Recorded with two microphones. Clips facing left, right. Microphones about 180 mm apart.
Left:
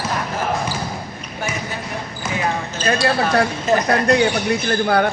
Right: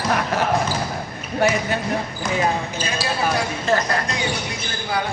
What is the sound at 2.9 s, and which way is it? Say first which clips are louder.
Speech: left 11 dB; 60° left (ahead or behind).